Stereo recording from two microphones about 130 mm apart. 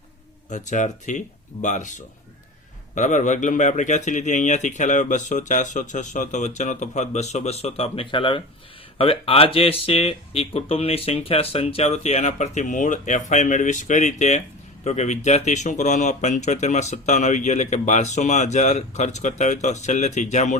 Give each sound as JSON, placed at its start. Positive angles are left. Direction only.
{"t": 0.5, "sound": "speech", "side_deg": 70}